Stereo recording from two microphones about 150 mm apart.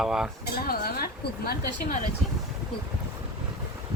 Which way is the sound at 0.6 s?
85° left.